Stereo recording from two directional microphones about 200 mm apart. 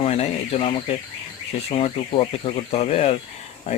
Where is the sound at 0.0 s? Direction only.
30° left (ahead or behind).